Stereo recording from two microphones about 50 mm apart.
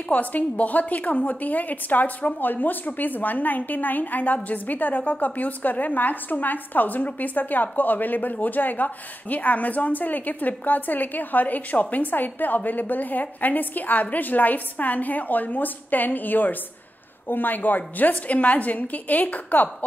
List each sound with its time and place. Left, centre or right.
0.1 s a woman's voice: left